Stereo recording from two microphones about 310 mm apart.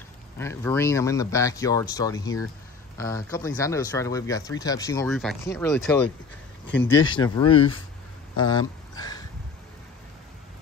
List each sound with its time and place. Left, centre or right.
0.4 s speech: centre